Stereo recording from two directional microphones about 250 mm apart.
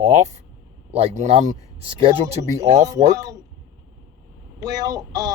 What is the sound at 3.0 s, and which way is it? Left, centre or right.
Speech, centre.